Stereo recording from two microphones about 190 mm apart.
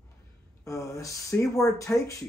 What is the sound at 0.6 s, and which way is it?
Speech, 15° left (ahead or behind).